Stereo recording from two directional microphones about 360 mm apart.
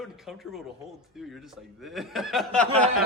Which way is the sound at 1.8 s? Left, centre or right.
Centre.